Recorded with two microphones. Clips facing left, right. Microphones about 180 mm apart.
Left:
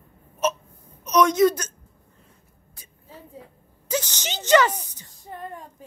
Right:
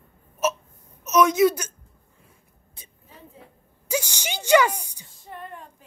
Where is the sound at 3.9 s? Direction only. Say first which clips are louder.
Even; 10° right (ahead or behind).